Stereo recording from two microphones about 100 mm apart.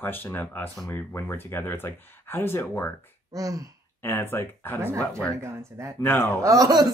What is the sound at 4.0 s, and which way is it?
Speech, 20° left (ahead or behind).